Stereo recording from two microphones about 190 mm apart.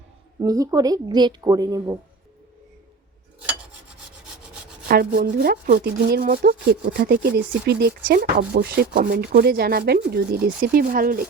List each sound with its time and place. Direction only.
0.3 s a woman's voice: 20° right (ahead or behind)
4.9 s speech: 55° right (ahead or behind)